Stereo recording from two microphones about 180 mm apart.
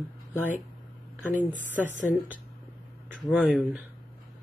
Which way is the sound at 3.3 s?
Centre (ahead or behind).